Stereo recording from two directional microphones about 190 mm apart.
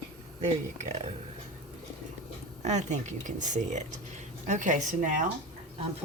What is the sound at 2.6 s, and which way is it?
Speech, 35° right (ahead or behind).